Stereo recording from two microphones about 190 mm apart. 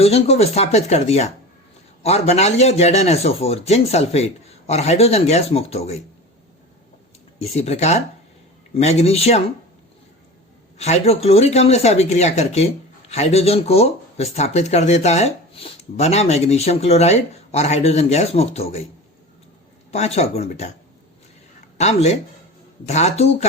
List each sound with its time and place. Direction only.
0.0 s speech: 30° left (ahead or behind)
7.3 s speech: 35° left (ahead or behind)
10.8 s speech: 35° left (ahead or behind)
19.9 s speech: 35° left (ahead or behind)
21.8 s speech: 35° left (ahead or behind)